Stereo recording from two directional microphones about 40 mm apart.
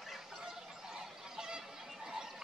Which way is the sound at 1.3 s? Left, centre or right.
Centre.